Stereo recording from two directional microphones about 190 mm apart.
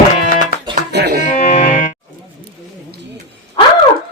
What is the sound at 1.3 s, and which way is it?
Music, 40° left (ahead or behind).